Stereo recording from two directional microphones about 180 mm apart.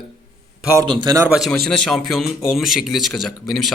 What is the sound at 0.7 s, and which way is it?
Speech, 20° right (ahead or behind).